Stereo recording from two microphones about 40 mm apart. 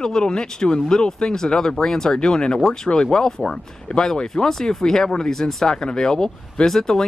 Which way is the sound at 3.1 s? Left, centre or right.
Centre.